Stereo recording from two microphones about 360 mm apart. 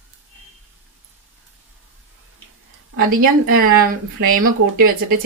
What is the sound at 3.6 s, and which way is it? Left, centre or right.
Speech, right.